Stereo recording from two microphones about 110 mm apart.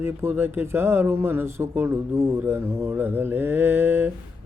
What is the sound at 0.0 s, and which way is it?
Speech, 20° right (ahead or behind).